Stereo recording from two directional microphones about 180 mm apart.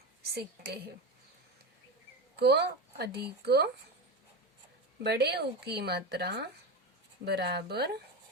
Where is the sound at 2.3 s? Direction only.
65° right (ahead or behind).